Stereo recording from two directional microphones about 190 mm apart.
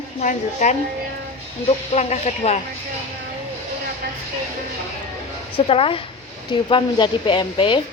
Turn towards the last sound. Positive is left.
turn(degrees=25)  # may be behind; listen again after turning